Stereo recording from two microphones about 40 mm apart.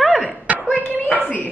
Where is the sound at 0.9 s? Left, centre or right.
Left.